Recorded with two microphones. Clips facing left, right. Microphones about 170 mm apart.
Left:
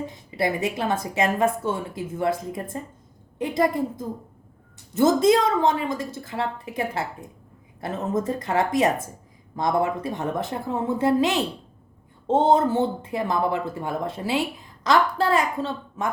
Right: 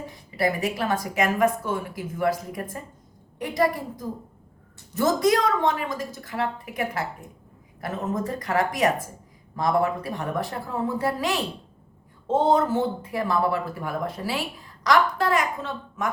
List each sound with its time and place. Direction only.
0.0 s a woman's voice: 20° left (ahead or behind)